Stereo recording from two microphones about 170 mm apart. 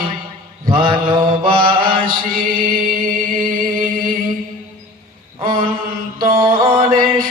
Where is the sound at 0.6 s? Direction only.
30° right (ahead or behind).